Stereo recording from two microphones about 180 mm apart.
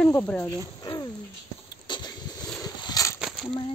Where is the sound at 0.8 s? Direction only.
20° left (ahead or behind).